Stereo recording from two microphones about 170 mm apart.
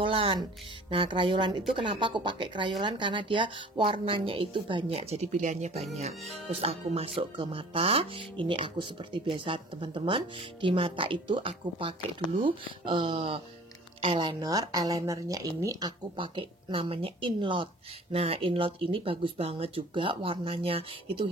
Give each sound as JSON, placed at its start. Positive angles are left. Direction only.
{"t": 0.0, "sound": "speech", "side_deg": -35}